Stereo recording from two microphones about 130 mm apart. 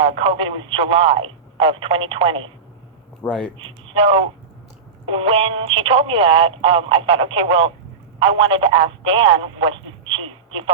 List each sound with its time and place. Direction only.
0.0 s speech: 45° right (ahead or behind)
3.2 s speech: 5° left (ahead or behind)
3.6 s speech: 45° right (ahead or behind)